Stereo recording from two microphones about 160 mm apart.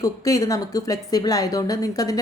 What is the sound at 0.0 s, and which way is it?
A woman's voice, 20° left (ahead or behind).